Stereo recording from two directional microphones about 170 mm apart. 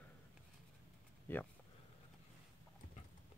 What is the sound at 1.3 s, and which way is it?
Speech, 10° left (ahead or behind).